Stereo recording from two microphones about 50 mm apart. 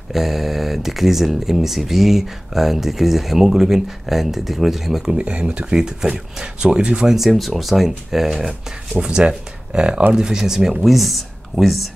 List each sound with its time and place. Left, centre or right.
0.1 s speech: centre
5.1 s speech: right
5.8 s speech: centre
7.2 s speech: centre
9.0 s speech: centre